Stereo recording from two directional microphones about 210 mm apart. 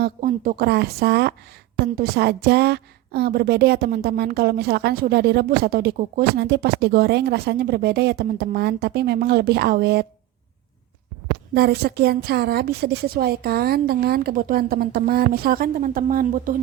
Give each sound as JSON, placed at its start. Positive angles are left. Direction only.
{"t": 0.0, "sound": "a woman's voice", "side_deg": -40}
{"t": 11.5, "sound": "a woman's voice", "side_deg": -50}